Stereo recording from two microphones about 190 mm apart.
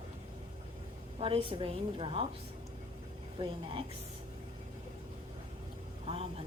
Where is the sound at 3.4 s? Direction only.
25° right (ahead or behind).